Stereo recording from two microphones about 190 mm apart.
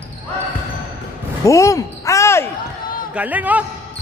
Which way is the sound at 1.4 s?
15° left (ahead or behind).